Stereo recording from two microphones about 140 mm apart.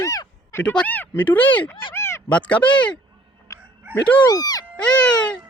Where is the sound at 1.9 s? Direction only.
20° left (ahead or behind).